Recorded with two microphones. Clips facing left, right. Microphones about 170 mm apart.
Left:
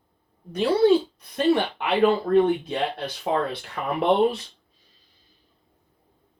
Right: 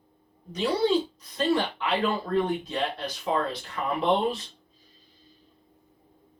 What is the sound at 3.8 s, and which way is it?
Speech, 60° left (ahead or behind).